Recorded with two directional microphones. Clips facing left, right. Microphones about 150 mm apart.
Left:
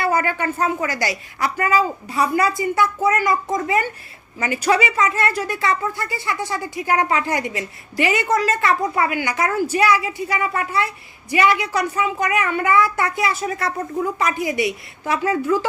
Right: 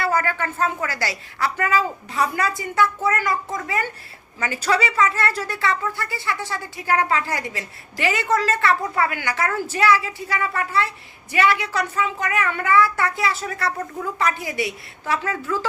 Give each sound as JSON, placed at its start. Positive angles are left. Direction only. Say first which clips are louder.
{"t": 0.0, "sound": "speech", "louder": "left 2 dB", "side_deg": 15}